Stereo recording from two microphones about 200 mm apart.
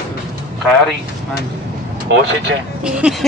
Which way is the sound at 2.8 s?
5° right (ahead or behind).